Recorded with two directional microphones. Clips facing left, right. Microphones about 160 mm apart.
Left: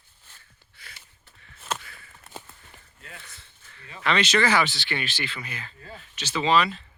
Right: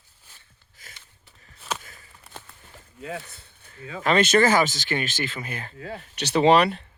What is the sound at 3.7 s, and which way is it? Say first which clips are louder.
Speech: right 4 dB; 45° right (ahead or behind).